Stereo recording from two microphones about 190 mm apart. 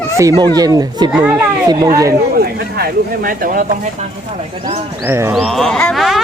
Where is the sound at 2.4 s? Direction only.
55° right (ahead or behind).